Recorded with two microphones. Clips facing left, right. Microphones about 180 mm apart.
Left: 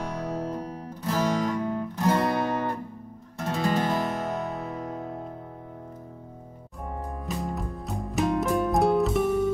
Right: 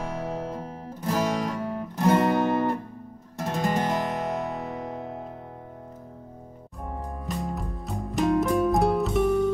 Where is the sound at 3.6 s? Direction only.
15° right (ahead or behind).